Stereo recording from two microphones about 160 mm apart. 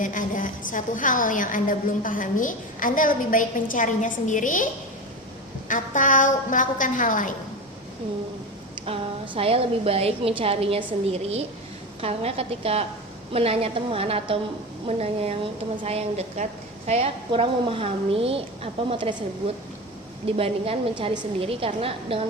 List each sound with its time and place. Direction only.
0.0 s a woman's voice: 55° left (ahead or behind)
9.3 s a woman's voice: 35° right (ahead or behind)
20.2 s a woman's voice: 35° right (ahead or behind)